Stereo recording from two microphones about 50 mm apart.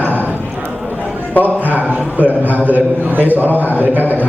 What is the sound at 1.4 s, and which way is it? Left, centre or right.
A man's voice, right.